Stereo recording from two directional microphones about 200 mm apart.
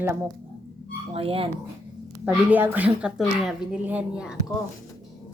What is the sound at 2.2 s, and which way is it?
A woman's voice, 10° right (ahead or behind).